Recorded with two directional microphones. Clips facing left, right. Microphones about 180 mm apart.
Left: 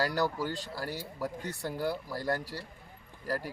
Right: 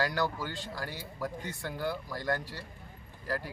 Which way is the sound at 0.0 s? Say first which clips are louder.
Left 2 dB; 35° left (ahead or behind).